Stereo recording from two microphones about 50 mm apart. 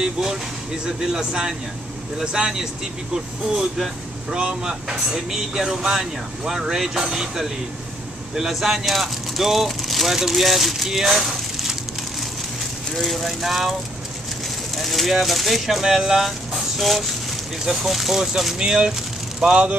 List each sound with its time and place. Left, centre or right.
0.0 s speech: centre
12.9 s speech: centre
14.8 s speech: centre
19.5 s speech: right